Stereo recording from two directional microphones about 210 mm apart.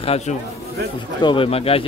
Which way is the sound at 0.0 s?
30° left (ahead or behind).